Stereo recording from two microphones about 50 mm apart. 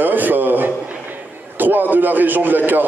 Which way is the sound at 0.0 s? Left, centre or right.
Right.